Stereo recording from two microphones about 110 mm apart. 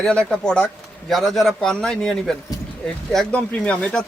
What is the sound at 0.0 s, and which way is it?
Speech, 5° left (ahead or behind).